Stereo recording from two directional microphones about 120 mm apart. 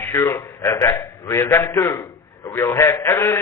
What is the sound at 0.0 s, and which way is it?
A man's voice, 20° left (ahead or behind).